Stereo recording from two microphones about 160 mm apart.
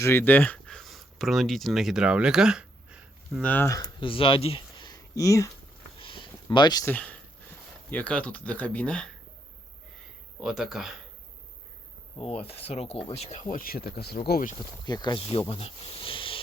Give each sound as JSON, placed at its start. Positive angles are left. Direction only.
{"t": 0.0, "sound": "speech", "side_deg": 15}
{"t": 3.4, "sound": "speech", "side_deg": 10}
{"t": 4.1, "sound": "speech", "side_deg": 35}
{"t": 6.0, "sound": "a sound", "side_deg": 30}
{"t": 6.8, "sound": "speech", "side_deg": 10}
{"t": 10.4, "sound": "speech", "side_deg": 0}
{"t": 12.1, "sound": "speech", "side_deg": 35}
{"t": 14.6, "sound": "speech", "side_deg": 25}